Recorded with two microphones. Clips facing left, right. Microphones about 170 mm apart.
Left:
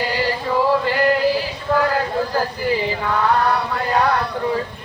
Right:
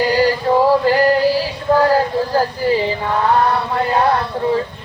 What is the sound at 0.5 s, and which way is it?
Male singing, 30° right (ahead or behind).